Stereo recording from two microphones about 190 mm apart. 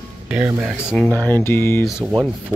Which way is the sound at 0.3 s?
5° right (ahead or behind).